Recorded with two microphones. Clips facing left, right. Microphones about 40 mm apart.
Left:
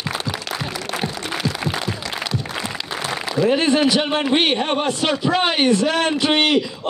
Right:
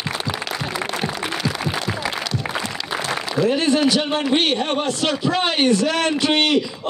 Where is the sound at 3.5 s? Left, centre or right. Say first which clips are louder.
Left 1 dB; left.